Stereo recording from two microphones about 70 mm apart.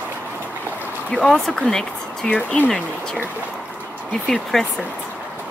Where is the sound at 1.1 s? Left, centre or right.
Centre.